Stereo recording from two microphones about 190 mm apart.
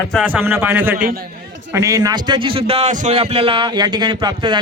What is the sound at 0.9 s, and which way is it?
Speech, 50° right (ahead or behind).